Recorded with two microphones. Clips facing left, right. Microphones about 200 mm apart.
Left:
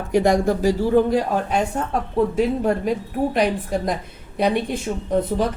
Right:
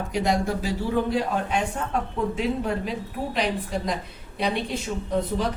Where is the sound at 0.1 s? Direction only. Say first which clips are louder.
Left 8 dB; 50° left (ahead or behind).